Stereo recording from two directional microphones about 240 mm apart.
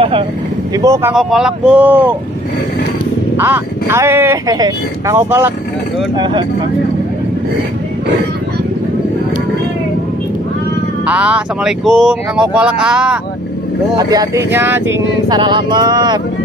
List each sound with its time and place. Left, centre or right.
0.7 s speech: centre
1.1 s speech: centre
3.3 s speech: centre
11.1 s speech: centre